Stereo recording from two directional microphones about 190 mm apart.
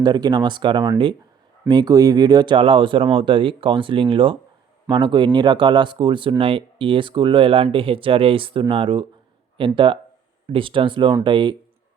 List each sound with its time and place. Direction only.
0.0 s speech: 20° right (ahead or behind)